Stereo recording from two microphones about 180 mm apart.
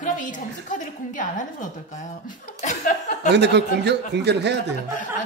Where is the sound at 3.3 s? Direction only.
70° right (ahead or behind).